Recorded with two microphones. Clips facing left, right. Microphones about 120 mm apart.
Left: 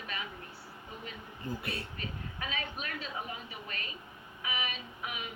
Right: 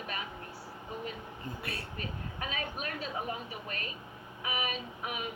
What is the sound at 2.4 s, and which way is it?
Speech, 45° right (ahead or behind).